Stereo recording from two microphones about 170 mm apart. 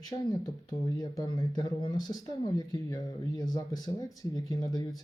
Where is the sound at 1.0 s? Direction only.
25° left (ahead or behind).